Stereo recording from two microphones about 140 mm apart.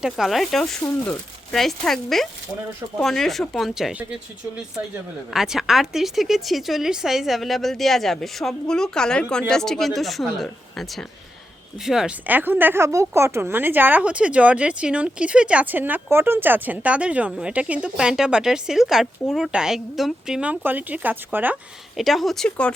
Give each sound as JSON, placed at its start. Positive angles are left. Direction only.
{"t": 0.0, "sound": "speech", "side_deg": 0}
{"t": 5.3, "sound": "speech", "side_deg": -5}
{"t": 21.9, "sound": "speech", "side_deg": 0}